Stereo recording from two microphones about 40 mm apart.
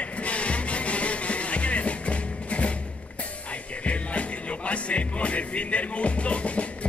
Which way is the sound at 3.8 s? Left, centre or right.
Left.